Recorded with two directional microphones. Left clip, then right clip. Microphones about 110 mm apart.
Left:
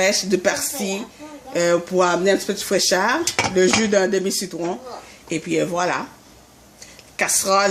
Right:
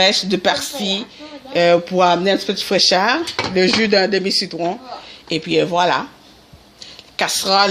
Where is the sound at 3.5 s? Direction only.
45° right (ahead or behind).